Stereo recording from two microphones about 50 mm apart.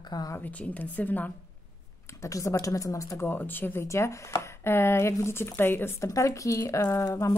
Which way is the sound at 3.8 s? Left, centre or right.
Left.